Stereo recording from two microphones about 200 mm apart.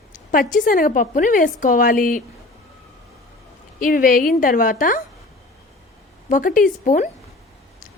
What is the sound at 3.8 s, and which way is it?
A woman's voice, 45° left (ahead or behind).